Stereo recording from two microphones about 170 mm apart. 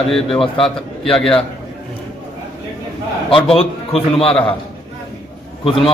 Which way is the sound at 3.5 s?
35° left (ahead or behind).